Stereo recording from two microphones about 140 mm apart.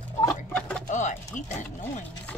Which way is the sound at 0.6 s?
5° left (ahead or behind).